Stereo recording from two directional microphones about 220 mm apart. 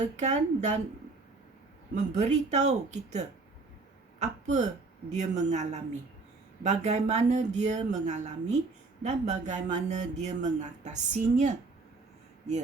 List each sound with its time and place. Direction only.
0.2 s speech: 30° right (ahead or behind)
2.0 s speech: 30° right (ahead or behind)